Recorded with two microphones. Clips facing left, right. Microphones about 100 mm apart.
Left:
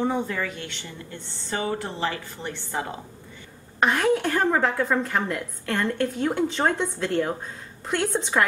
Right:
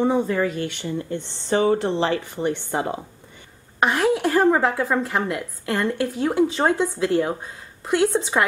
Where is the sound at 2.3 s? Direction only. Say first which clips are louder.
Right 10 dB; 15° right (ahead or behind).